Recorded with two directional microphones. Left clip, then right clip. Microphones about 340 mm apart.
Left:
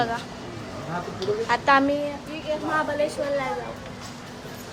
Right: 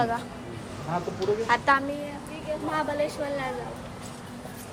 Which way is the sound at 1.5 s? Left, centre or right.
Centre.